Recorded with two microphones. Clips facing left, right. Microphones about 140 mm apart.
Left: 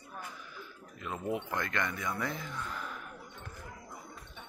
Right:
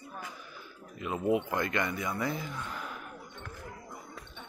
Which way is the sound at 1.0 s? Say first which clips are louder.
Right 7 dB; 10° right (ahead or behind).